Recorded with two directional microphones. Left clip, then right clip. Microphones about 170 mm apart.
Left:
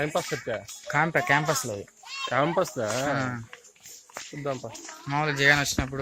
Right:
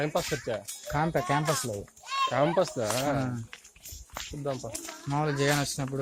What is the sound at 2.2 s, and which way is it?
Speech, 35° left (ahead or behind).